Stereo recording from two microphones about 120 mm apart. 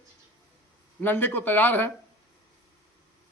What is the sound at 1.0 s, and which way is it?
Speech, 15° left (ahead or behind).